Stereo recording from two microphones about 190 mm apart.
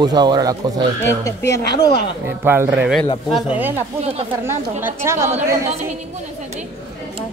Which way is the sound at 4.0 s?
35° right (ahead or behind).